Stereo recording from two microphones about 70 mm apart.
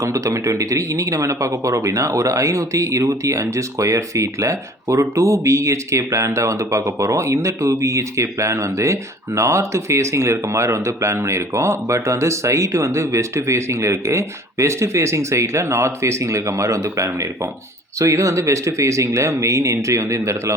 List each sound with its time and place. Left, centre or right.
0.0 s speech: right